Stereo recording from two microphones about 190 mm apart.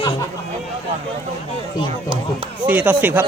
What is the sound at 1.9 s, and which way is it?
Speech, 25° right (ahead or behind).